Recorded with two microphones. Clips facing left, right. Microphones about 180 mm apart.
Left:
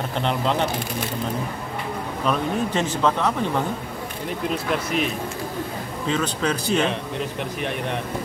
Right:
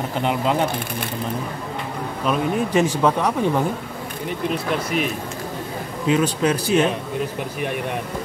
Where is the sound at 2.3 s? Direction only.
10° right (ahead or behind).